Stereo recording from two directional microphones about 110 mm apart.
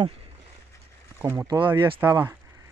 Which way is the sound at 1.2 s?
30° right (ahead or behind).